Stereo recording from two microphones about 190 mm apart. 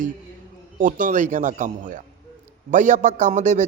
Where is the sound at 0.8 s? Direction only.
45° right (ahead or behind).